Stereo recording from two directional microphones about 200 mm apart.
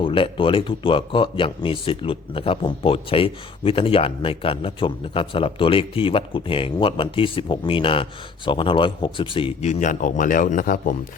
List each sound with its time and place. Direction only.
0.0 s a man's voice: 25° left (ahead or behind); by 10.9 s 45° left (ahead or behind)